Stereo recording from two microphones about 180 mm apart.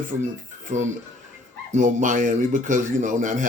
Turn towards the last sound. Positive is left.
turn(degrees=-45)  # may be behind; listen again after turning